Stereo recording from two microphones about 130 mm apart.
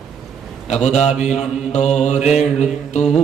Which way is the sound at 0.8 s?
60° left (ahead or behind).